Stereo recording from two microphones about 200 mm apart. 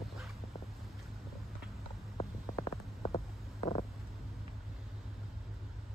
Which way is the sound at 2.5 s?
20° left (ahead or behind).